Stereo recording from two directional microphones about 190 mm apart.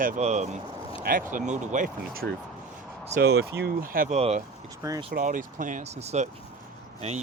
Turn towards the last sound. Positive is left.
turn(degrees=-35)  # may be behind; listen again after turning